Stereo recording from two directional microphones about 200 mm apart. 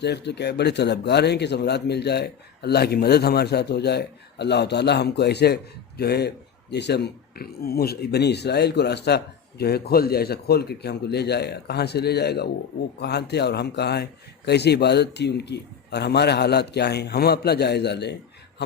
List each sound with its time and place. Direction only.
0.0 s speech: 55° left (ahead or behind)